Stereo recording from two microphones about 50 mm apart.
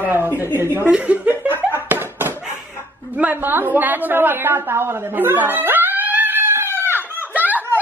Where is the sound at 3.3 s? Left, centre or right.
Right.